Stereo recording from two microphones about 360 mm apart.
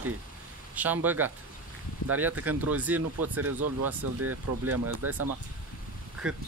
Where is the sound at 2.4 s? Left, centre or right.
Centre.